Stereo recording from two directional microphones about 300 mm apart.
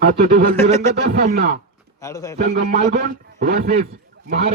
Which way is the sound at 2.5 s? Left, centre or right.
Right.